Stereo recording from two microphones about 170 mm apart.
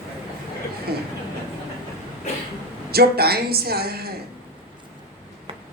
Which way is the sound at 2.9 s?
65° right (ahead or behind).